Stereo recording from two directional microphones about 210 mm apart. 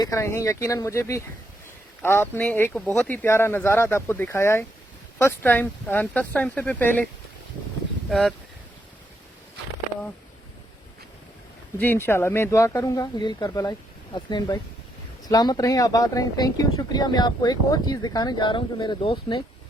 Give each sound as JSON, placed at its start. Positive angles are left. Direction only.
{"t": 0.0, "sound": "speech", "side_deg": 15}
{"t": 11.8, "sound": "speech", "side_deg": 10}